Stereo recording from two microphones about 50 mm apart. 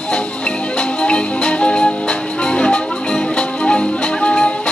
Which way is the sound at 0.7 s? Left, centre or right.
Left.